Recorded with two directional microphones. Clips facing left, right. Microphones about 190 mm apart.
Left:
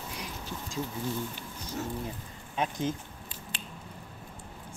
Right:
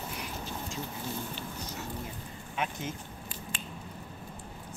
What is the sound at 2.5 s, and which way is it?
Speech, 30° left (ahead or behind).